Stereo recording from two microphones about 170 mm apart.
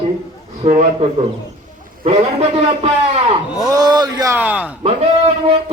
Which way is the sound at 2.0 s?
35° right (ahead or behind).